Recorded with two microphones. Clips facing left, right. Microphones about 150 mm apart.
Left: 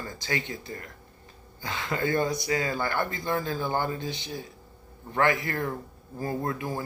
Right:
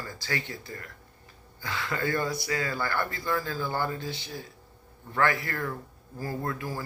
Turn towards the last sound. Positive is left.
turn(degrees=20)  # may be behind; listen again after turning